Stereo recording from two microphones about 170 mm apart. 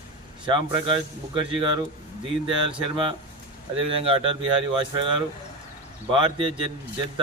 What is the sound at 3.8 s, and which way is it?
Speech, 35° right (ahead or behind).